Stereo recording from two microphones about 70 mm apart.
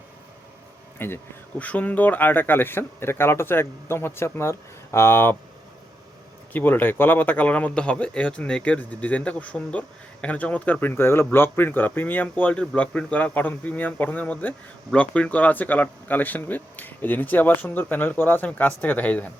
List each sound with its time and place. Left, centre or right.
0.9 s speech: left
1.5 s speech: left
6.5 s speech: left